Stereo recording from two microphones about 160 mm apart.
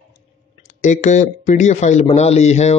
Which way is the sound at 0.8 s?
50° left (ahead or behind).